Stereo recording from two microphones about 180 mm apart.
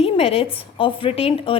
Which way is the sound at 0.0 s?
30° left (ahead or behind).